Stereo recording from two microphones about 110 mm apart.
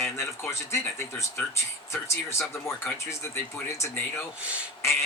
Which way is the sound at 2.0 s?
25° left (ahead or behind).